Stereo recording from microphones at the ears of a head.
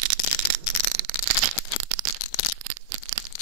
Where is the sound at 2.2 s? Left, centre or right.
Left.